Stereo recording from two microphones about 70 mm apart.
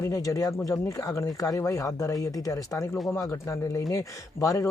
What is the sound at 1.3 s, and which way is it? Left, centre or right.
Speech, left.